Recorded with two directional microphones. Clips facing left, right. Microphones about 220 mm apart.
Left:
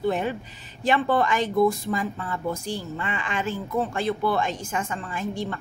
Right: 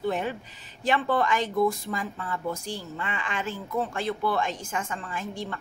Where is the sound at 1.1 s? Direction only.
20° left (ahead or behind).